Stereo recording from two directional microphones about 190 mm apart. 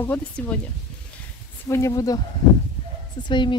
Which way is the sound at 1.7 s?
15° left (ahead or behind).